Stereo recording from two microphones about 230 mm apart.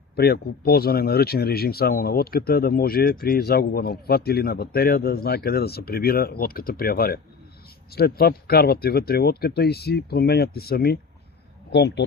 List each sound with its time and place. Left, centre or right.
0.2 s speech: left